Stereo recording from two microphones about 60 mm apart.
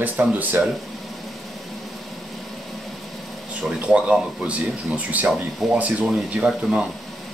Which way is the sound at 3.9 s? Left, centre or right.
Centre.